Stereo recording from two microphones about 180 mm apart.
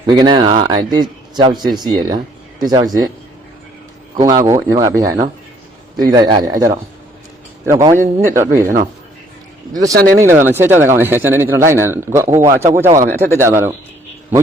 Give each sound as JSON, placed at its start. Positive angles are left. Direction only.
{"t": 0.0, "sound": "speech", "side_deg": -25}
{"t": 4.1, "sound": "speech", "side_deg": -20}
{"t": 9.7, "sound": "speech", "side_deg": -20}